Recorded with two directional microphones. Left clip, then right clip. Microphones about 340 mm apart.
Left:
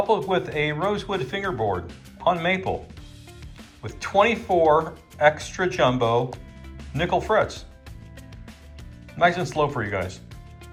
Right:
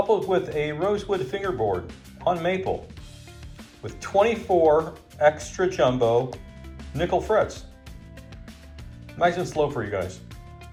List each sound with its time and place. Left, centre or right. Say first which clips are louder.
0.1 s speech: even; centre
4.2 s speech: left 1 dB; centre
9.3 s speech: left 1 dB; centre